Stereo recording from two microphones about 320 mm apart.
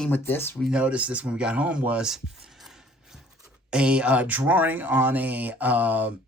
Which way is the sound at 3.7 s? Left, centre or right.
Centre.